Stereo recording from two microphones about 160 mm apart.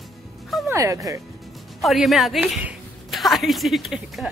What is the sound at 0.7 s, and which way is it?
Speech, 20° right (ahead or behind).